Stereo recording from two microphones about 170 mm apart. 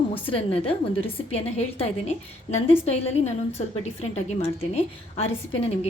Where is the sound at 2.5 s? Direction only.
40° left (ahead or behind).